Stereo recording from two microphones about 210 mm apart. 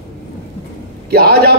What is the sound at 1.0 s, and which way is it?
Speech, 45° right (ahead or behind).